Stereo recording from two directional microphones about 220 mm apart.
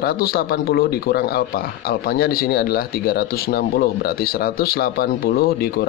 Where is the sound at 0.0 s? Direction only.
45° left (ahead or behind).